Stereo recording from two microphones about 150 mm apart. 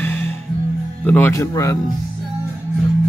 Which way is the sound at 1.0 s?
15° left (ahead or behind).